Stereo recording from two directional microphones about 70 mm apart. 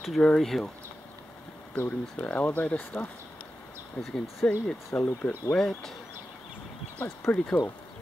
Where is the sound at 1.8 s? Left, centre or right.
Left.